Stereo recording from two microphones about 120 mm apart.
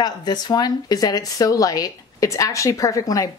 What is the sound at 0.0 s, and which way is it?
Speech, 35° left (ahead or behind).